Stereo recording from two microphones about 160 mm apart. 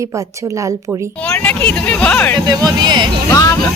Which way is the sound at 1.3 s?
5° left (ahead or behind).